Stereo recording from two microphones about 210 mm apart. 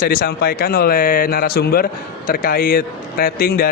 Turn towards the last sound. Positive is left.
turn(degrees=45)  # may be behind; listen again after turning